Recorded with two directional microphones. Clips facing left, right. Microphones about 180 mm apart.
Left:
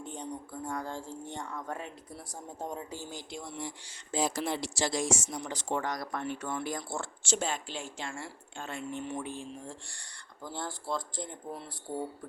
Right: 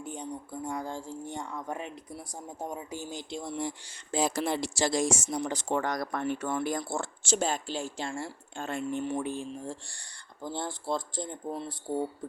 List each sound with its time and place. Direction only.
0.0 s speech: 10° right (ahead or behind)
4.1 s speech: 60° right (ahead or behind); by 10.0 s 40° right (ahead or behind)
10.4 s speech: 25° right (ahead or behind)